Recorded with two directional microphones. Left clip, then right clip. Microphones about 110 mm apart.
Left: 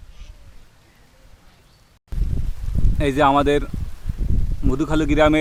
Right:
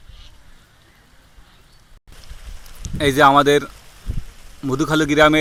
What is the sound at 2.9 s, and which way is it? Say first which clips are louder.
A man's voice: right 4 dB; 15° right (ahead or behind).